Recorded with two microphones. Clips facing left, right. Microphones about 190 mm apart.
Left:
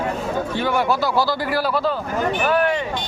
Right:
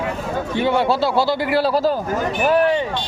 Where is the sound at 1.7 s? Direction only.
40° right (ahead or behind).